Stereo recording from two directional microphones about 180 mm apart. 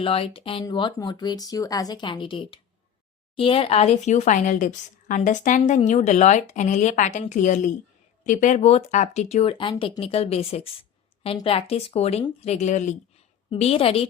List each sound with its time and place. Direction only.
0.0 s a woman's voice: 30° left (ahead or behind)